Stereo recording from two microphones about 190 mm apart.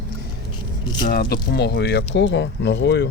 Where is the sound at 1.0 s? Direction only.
55° left (ahead or behind).